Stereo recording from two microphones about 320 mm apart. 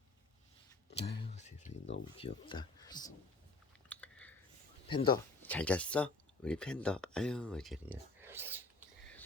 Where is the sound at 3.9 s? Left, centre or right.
Centre.